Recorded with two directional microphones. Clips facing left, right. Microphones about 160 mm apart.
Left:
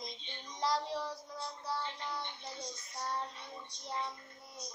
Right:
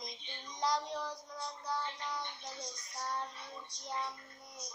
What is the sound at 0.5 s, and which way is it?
Child singing, centre (ahead or behind).